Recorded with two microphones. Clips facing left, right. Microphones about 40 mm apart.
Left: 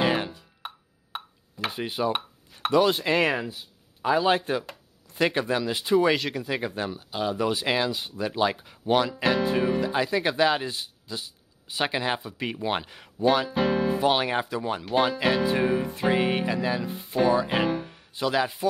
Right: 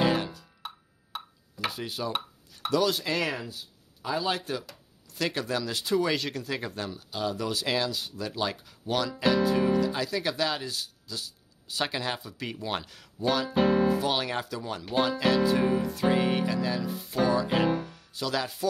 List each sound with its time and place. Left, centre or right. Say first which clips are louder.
0.0 s music: left 1 dB; left
2.7 s speech: left 5 dB; left
6.1 s speech: left 3 dB; centre